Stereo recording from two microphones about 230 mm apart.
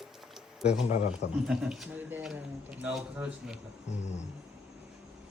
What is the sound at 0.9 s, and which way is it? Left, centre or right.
Speech, left.